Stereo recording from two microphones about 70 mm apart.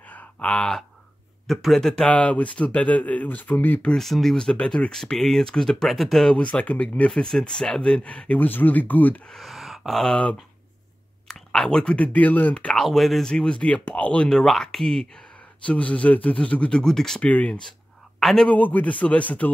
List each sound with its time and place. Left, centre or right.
0.0 s a sound: centre
1.5 s speech: centre
2.0 s speech: left
3.9 s speech: centre
6.3 s speech: centre
9.3 s a sound: centre
11.2 s speech: centre
12.7 s speech: centre
13.3 s speech: centre
14.4 s speech: centre
17.3 s speech: centre
18.5 s speech: left